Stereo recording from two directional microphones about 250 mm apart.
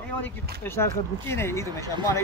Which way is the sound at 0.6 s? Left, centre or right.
Centre.